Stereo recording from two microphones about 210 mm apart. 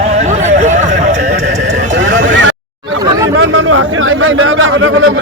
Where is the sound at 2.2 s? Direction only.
60° right (ahead or behind).